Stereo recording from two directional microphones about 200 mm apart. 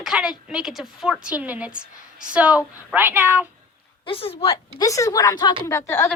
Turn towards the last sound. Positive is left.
turn(degrees=15)  # may be behind; listen again after turning